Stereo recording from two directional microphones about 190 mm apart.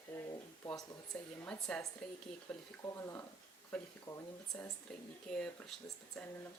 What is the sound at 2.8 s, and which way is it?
Speech, 15° left (ahead or behind).